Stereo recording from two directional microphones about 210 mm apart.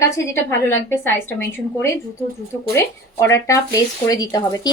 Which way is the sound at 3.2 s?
15° left (ahead or behind).